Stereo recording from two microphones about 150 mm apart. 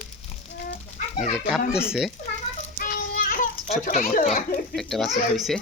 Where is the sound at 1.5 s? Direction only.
Centre (ahead or behind).